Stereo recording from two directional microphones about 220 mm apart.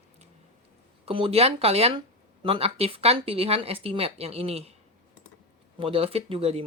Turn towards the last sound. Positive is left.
turn(degrees=-25)  # may be behind; listen again after turning